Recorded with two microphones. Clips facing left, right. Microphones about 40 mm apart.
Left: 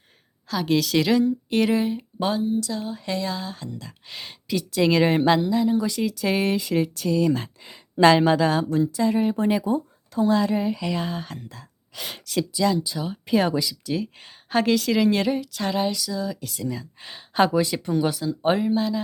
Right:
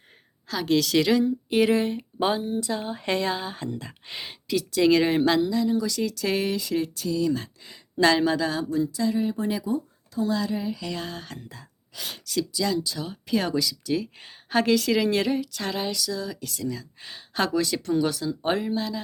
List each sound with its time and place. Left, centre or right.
0.4 s a woman's voice: centre
2.4 s speech: right
3.3 s speech: right
4.1 s speech: centre
4.4 s a woman's voice: centre; by 6.0 s left
6.0 s speech: centre
6.5 s speech: left
7.0 s speech: left
7.4 s speech: left
10.9 s a woman's voice: centre
12.1 s speech: left
12.5 s speech: centre
13.8 s a woman's voice: centre